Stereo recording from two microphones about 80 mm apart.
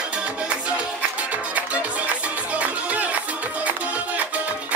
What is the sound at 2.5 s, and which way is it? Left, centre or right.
Music, centre.